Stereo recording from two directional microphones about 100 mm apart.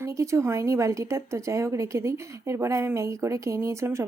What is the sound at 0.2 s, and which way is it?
A woman's voice, 30° right (ahead or behind).